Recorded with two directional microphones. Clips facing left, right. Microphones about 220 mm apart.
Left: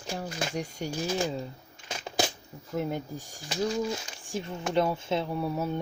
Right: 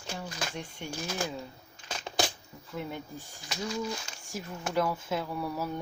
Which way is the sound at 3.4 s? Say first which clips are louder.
Left 5 dB; 30° left (ahead or behind).